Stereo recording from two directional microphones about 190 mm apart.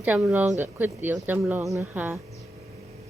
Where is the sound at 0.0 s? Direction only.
5° right (ahead or behind).